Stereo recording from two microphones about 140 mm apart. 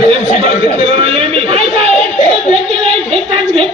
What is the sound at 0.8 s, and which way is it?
Speech, 45° right (ahead or behind).